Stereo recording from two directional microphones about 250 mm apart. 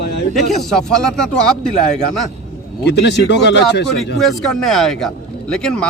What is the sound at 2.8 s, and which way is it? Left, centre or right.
Speech, left.